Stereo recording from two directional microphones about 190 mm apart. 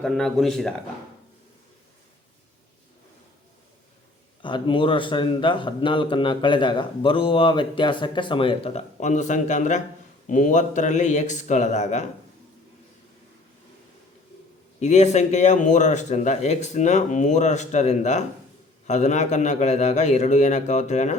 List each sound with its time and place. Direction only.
0.0 s speech: centre (ahead or behind)
4.4 s a man's voice: 25° left (ahead or behind)
14.8 s speech: 35° left (ahead or behind)